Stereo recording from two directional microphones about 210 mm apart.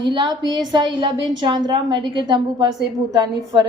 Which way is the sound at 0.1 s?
20° right (ahead or behind).